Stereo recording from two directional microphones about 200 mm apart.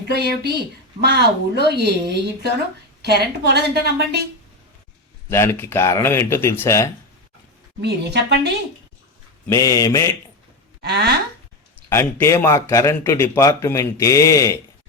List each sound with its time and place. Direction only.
0.1 s a woman's voice: 55° right (ahead or behind)
5.3 s a man's voice: 10° left (ahead or behind)
7.8 s a woman's voice: 55° right (ahead or behind)
9.5 s a man's voice: 15° left (ahead or behind)
10.8 s a woman's voice: 55° right (ahead or behind)
11.9 s a man's voice: 15° left (ahead or behind)